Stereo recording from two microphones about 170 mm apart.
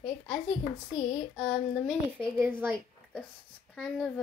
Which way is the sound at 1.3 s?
5° right (ahead or behind).